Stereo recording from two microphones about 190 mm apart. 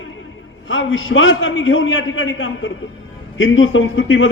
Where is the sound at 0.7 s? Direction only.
90° left.